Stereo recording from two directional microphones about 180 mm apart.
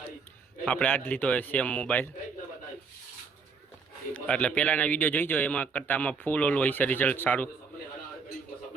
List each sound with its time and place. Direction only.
0.6 s a man's voice: 5° left (ahead or behind)
4.1 s a man's voice: 5° left (ahead or behind)